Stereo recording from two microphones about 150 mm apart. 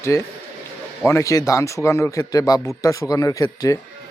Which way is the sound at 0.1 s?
20° left (ahead or behind).